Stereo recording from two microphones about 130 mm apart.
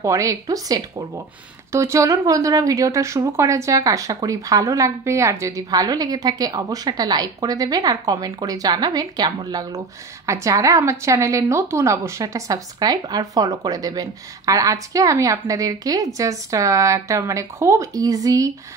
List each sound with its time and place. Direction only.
0.0 s a woman's voice: 25° right (ahead or behind)